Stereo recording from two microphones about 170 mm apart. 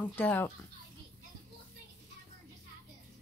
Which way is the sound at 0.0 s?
10° left (ahead or behind).